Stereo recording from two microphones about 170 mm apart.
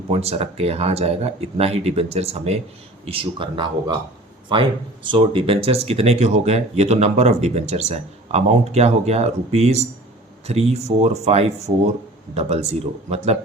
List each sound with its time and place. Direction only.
0.1 s speech: 35° right (ahead or behind)